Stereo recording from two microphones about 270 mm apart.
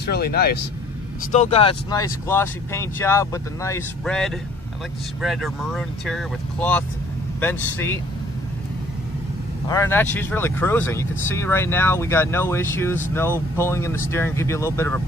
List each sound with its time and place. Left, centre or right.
0.0 s speech: left
1.3 s speech: left; by 8.0 s centre
9.7 s speech: centre